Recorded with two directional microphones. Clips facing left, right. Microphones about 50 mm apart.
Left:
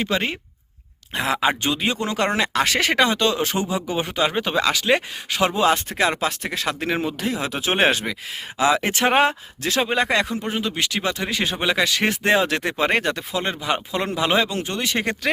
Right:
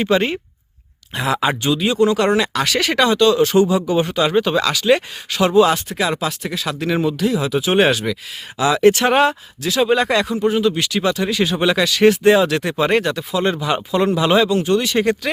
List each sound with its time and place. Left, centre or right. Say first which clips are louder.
0.1 s speech: right 7 dB; centre
1.1 s speech: right 2 dB; left
1.6 s speech: right 7 dB; left
5.9 s speech: right 1 dB; left
11.5 s speech: right 3 dB; centre
11.9 s speech: right 7 dB; left
13.4 s speech: right 6 dB; left